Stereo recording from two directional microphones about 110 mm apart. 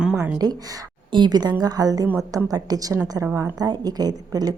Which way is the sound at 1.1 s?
40° right (ahead or behind).